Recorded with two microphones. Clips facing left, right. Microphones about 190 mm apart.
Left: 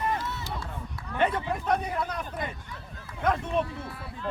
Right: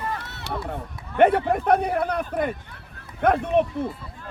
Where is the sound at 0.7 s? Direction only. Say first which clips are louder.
Right 4 dB; 60° right (ahead or behind).